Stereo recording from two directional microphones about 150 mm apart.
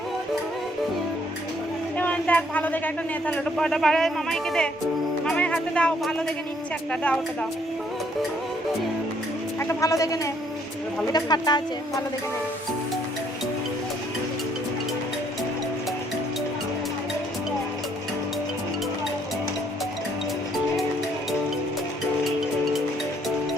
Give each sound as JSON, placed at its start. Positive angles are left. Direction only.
{"t": 2.0, "sound": "speech", "side_deg": 10}
{"t": 9.6, "sound": "a woman's voice", "side_deg": 20}